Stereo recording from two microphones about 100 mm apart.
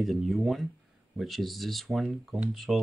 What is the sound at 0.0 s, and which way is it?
Speech, centre (ahead or behind).